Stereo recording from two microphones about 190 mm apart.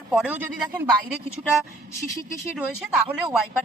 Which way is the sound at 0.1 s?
5° right (ahead or behind).